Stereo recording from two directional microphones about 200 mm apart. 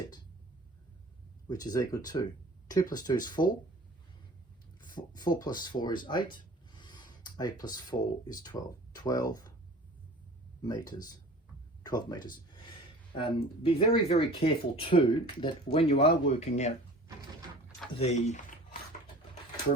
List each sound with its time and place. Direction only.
1.5 s speech: 20° left (ahead or behind)
4.8 s speech: 20° left (ahead or behind)
6.0 s a sound: 20° left (ahead or behind)
7.6 s speech: 20° left (ahead or behind)
10.6 s speech: 20° left (ahead or behind); by 16.7 s 35° left (ahead or behind)
17.9 s speech: 35° left (ahead or behind)